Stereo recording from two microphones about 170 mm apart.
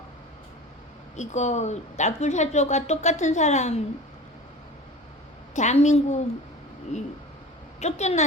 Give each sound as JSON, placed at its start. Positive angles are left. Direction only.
{"t": 1.1, "sound": "a woman's voice", "side_deg": 45}
{"t": 5.5, "sound": "a woman's voice", "side_deg": 45}
{"t": 7.8, "sound": "a woman's voice", "side_deg": 40}